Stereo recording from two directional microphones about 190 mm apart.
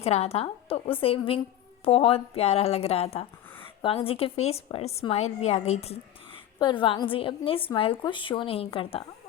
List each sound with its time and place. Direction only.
0.0 s a woman's voice: 35° left (ahead or behind)